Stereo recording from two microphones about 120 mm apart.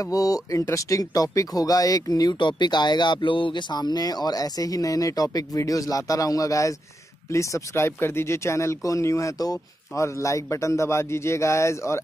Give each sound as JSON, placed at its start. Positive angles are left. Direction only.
{"t": 0.0, "sound": "speech", "side_deg": 30}